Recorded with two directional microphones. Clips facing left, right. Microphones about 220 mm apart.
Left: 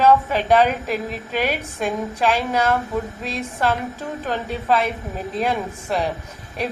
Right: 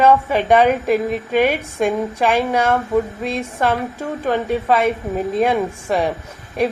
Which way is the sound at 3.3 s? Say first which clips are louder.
Right 1 dB; 10° right (ahead or behind).